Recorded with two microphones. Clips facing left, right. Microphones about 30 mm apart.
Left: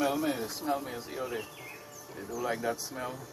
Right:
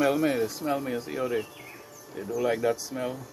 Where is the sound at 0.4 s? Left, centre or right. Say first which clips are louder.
Right 5 dB; right.